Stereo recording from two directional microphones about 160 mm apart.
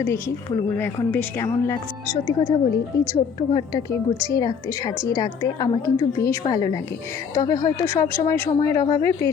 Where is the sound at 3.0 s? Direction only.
20° left (ahead or behind).